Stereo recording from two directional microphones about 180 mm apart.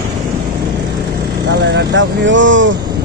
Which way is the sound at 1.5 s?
75° right (ahead or behind).